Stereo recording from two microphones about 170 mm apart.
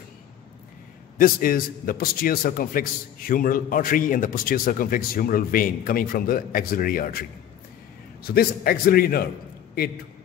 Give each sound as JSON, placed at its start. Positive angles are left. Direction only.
{"t": 1.1, "sound": "a man's voice", "side_deg": 55}
{"t": 8.4, "sound": "a man's voice", "side_deg": 60}